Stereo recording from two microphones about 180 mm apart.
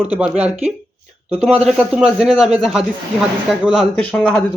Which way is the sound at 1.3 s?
Centre (ahead or behind).